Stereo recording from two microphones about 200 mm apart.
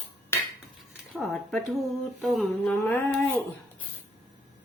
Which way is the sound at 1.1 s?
Centre (ahead or behind).